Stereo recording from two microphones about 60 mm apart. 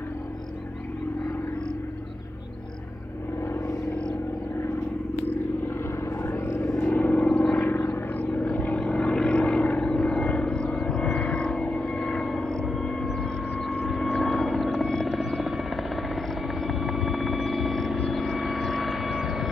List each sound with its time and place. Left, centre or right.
6.2 s vehicle: left
6.8 s vehicle: left
7.6 s vehicle: left
8.1 s vehicle: left
12.6 s a sound: centre
13.1 s vehicle: centre
14.8 s helicopter: centre
15.0 s helicopter: centre